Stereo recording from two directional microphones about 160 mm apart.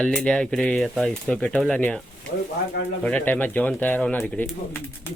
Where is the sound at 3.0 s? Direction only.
10° left (ahead or behind).